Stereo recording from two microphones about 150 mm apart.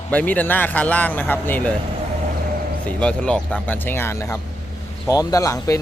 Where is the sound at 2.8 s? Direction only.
5° left (ahead or behind).